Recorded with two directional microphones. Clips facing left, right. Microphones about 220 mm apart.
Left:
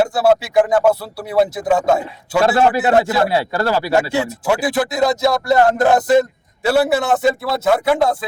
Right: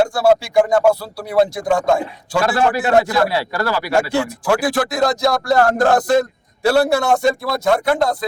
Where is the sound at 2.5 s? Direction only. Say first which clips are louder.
Left 2 dB; 20° left (ahead or behind).